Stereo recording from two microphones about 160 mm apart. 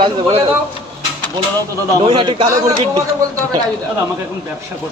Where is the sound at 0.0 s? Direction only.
35° right (ahead or behind).